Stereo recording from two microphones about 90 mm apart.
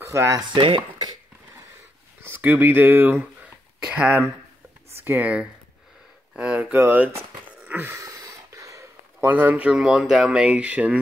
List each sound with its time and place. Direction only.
0.0 s speech: 30° right (ahead or behind)
0.6 s speech: 80° right
2.2 s speech: 25° right (ahead or behind)
4.9 s a sound: 25° right (ahead or behind)
5.2 s speech: 15° right (ahead or behind)
6.3 s a sound: 10° right (ahead or behind)
6.8 s speech: 20° right (ahead or behind)
7.6 s a sound: 25° right (ahead or behind)
9.3 s speech: 20° right (ahead or behind)